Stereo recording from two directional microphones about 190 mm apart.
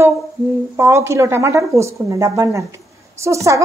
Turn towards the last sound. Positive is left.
turn(degrees=-15)  # may be behind; listen again after turning